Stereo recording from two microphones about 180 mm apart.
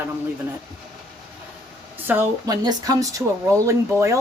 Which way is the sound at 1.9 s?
10° right (ahead or behind).